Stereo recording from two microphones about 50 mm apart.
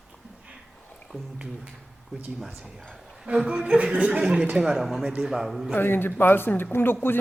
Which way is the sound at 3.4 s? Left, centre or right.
Right.